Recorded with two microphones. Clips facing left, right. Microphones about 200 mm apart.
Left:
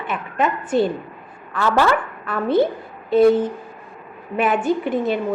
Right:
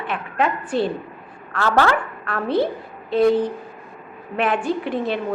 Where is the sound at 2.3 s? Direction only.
Centre (ahead or behind).